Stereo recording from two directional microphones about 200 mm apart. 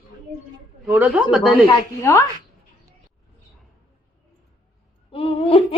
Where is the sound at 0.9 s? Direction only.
10° right (ahead or behind).